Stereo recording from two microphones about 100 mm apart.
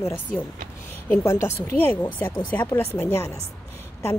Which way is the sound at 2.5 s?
20° left (ahead or behind).